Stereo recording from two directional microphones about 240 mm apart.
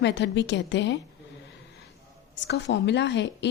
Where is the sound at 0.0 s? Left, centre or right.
Left.